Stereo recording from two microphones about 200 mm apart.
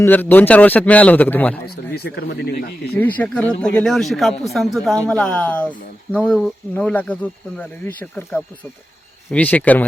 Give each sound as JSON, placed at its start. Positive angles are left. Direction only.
{"t": 0.0, "sound": "a man's voice", "side_deg": 10}
{"t": 1.6, "sound": "speech", "side_deg": 55}
{"t": 3.0, "sound": "a man's voice", "side_deg": 10}